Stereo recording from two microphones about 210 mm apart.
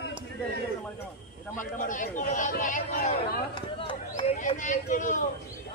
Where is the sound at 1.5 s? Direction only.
40° left (ahead or behind).